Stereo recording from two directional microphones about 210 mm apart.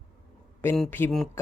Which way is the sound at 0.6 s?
10° left (ahead or behind).